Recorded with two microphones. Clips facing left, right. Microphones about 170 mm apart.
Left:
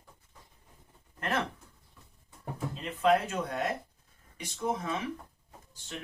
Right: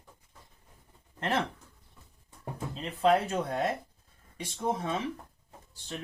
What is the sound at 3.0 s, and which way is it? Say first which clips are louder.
Speech: right 1 dB; 30° right (ahead or behind).